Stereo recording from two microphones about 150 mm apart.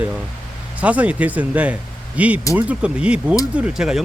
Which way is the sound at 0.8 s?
10° right (ahead or behind).